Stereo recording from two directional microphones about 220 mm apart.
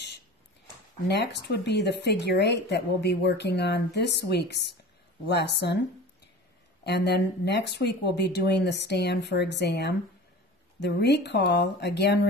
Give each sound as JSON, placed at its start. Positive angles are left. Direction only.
{"t": 1.0, "sound": "speech", "side_deg": 50}